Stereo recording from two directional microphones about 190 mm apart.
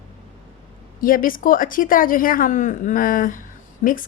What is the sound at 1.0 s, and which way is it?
Speech, 45° left (ahead or behind).